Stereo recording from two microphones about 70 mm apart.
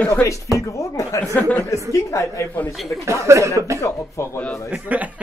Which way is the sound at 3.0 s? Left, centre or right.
Right.